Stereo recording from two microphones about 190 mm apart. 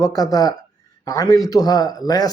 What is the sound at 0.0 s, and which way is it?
A man's voice, 20° left (ahead or behind).